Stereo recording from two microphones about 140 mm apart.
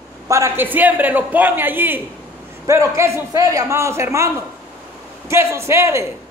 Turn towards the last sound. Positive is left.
turn(degrees=-20)  # may be behind; listen again after turning